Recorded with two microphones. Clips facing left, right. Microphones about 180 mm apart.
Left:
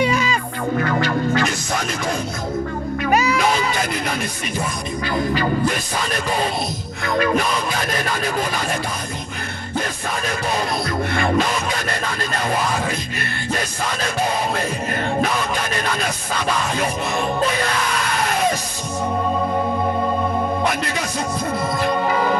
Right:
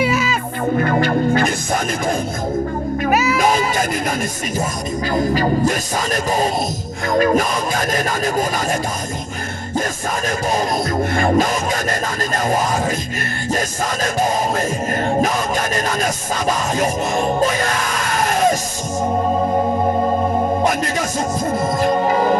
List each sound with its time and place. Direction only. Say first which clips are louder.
0.0 s music: right 1 dB; 5° right (ahead or behind)
1.4 s music: right 3 dB; 50° right (ahead or behind)
3.1 s music: even; 5° right (ahead or behind)
3.4 s baby cry: right 3 dB; 45° right (ahead or behind)
5.1 s music: right 3 dB; 40° right (ahead or behind)
10.2 s music: right 4 dB; 45° right (ahead or behind)
19.0 s music: right 3 dB; 35° right (ahead or behind)